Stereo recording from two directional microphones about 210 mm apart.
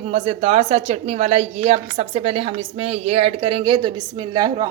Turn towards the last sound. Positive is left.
turn(degrees=-20)  # may be behind; listen again after turning